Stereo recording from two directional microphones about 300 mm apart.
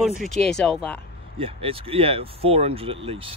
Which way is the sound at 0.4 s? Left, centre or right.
Centre.